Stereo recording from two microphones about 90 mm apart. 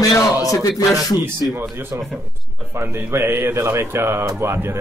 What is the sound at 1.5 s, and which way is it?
Speech, 25° right (ahead or behind).